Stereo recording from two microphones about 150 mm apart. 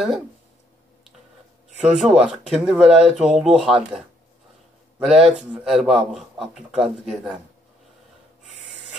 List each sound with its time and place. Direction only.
1.8 s a man's voice: 5° right (ahead or behind)